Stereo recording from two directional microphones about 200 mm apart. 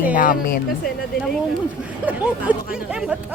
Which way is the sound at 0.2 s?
45° left (ahead or behind).